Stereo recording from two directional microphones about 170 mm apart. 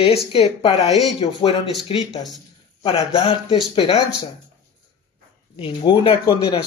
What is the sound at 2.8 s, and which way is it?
Speech, 35° left (ahead or behind).